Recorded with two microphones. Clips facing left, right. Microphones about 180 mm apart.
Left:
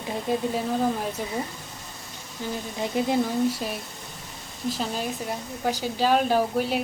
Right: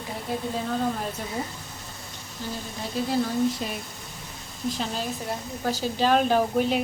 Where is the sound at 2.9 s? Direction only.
20° left (ahead or behind).